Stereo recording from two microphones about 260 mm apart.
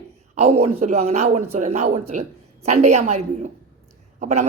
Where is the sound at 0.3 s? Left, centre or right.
Right.